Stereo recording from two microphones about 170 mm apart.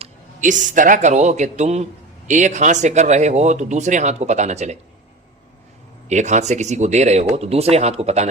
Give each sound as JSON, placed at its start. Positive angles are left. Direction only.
{"t": 0.0, "sound": "speech", "side_deg": -45}
{"t": 6.1, "sound": "speech", "side_deg": -45}